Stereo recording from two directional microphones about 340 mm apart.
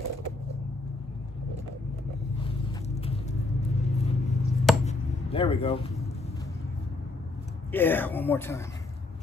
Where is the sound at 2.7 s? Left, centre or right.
Centre.